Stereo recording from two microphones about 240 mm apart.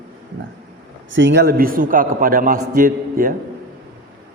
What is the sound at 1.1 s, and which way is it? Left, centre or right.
A man's voice, right.